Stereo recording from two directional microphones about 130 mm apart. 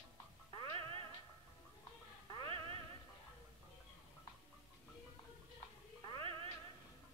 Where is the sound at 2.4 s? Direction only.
45° right (ahead or behind).